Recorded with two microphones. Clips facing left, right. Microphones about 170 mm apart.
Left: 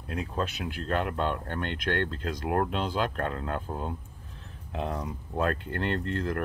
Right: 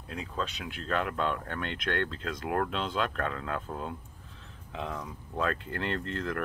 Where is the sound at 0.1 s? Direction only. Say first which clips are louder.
Left 4 dB; 55° left (ahead or behind).